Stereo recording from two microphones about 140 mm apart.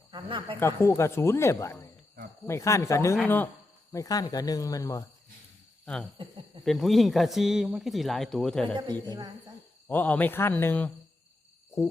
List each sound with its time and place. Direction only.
0.1 s speech: 35° right (ahead or behind)
0.6 s speech: 20° left (ahead or behind)
3.9 s speech: 25° left (ahead or behind)
5.8 s speech: 5° left (ahead or behind)
8.6 s speech: 35° right (ahead or behind)
9.9 s speech: 10° left (ahead or behind)